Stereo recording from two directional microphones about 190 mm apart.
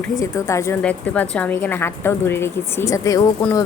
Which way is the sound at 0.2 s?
15° left (ahead or behind).